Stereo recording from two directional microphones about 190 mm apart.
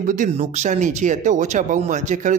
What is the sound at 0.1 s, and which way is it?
Speech, 40° right (ahead or behind).